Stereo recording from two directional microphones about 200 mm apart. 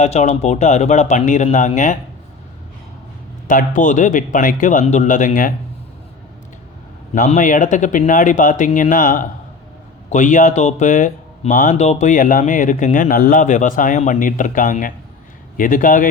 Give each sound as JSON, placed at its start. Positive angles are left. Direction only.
{"t": 0.0, "sound": "speech", "side_deg": 35}
{"t": 3.4, "sound": "speech", "side_deg": 45}
{"t": 7.1, "sound": "speech", "side_deg": 35}